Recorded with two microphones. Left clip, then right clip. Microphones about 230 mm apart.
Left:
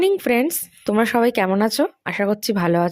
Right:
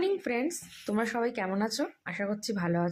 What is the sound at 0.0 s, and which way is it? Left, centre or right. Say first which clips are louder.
Speech: left 12 dB; left.